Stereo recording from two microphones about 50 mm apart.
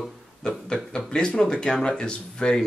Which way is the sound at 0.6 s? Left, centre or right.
Centre.